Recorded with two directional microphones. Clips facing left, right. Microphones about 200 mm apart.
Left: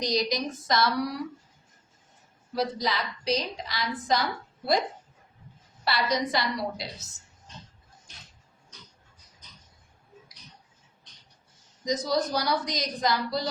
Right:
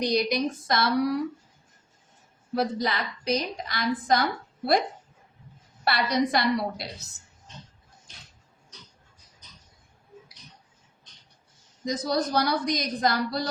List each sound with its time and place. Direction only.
0.0 s a woman's voice: 60° right (ahead or behind)
2.6 s a woman's voice: 55° right (ahead or behind)
5.8 s a woman's voice: 55° right (ahead or behind)
11.9 s a woman's voice: 55° right (ahead or behind)